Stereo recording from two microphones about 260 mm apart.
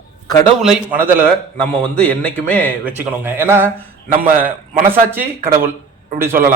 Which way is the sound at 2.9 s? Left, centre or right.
Centre.